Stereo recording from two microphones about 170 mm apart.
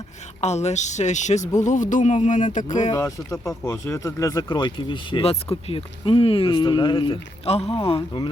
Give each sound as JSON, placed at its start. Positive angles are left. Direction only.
{"t": 0.4, "sound": "music", "side_deg": 40}
{"t": 2.9, "sound": "speech", "side_deg": 20}